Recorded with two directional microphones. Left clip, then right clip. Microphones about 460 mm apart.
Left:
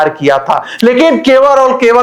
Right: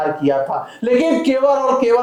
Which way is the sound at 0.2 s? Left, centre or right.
Left.